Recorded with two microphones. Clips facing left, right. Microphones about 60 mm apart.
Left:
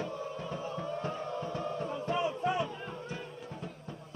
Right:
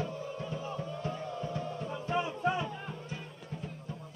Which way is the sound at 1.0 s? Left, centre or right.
Left.